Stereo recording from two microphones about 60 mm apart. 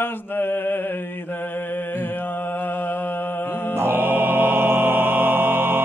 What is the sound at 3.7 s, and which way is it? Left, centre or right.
Music, right.